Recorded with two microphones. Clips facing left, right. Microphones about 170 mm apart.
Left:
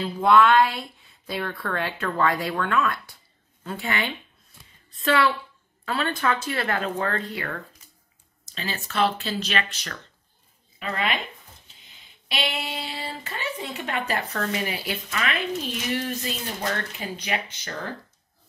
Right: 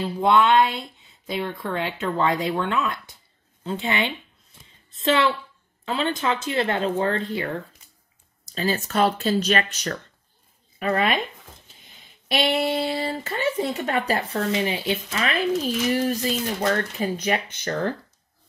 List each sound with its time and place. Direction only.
0.2 s speech: 20° right (ahead or behind)
8.5 s speech: 40° right (ahead or behind)
12.3 s speech: 45° right (ahead or behind)